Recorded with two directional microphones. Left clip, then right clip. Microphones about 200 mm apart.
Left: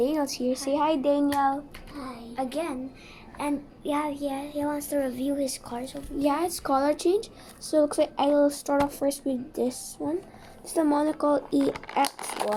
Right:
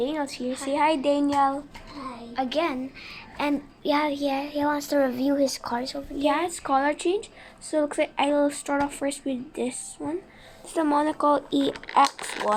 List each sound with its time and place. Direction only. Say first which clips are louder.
0.0 s a child's voice: left 2 dB; 25° left (ahead or behind)
1.3 s speech: right 2 dB; 10° right (ahead or behind)
2.3 s a child's voice: right 5 dB; 35° right (ahead or behind)
3.3 s child singing: right 3 dB; 30° right (ahead or behind)
6.2 s speech: right 2 dB; 20° left (ahead or behind)
9.0 s speech: left 1 dB; 15° left (ahead or behind)
10.0 s speech: left 1 dB; 5° right (ahead or behind)
10.8 s speech: right 1 dB; 15° left (ahead or behind)